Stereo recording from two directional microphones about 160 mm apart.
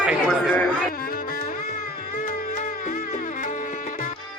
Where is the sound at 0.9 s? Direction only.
65° left (ahead or behind).